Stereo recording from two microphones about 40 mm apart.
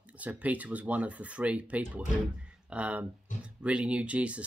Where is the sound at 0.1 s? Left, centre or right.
Right.